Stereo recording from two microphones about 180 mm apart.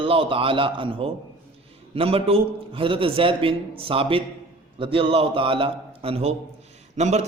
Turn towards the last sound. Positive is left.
turn(degrees=-40)  # may be behind; listen again after turning